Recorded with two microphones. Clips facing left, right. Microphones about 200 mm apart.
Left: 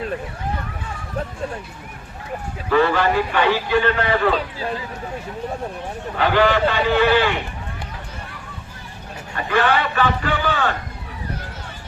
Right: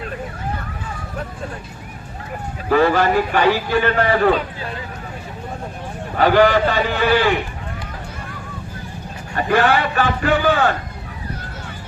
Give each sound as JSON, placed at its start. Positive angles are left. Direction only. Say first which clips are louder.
{"t": 2.6, "sound": "a man's voice", "louder": "right 2 dB", "side_deg": -40}
{"t": 6.1, "sound": "a man's voice", "louder": "right 4 dB", "side_deg": -40}
{"t": 9.3, "sound": "a man's voice", "louder": "right 3 dB", "side_deg": -45}